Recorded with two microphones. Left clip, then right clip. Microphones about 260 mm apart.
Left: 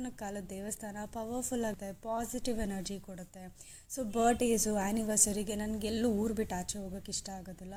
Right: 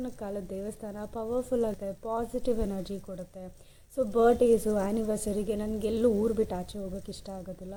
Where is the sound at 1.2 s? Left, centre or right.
Centre.